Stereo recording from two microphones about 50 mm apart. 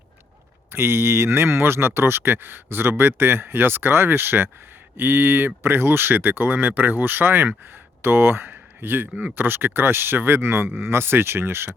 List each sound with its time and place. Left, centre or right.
0.7 s speech: right